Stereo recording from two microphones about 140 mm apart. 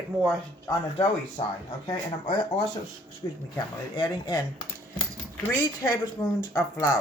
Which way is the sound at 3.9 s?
30° left (ahead or behind).